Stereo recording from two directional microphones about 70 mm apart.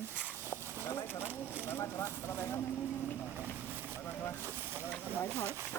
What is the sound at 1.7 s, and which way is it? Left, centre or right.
Speech, left.